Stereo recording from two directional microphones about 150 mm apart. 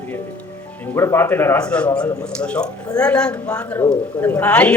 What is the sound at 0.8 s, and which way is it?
A man's voice, 15° left (ahead or behind).